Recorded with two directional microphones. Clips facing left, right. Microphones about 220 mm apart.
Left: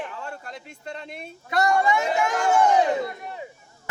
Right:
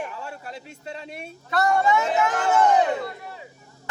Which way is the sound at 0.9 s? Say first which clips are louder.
Right 1 dB; 10° right (ahead or behind).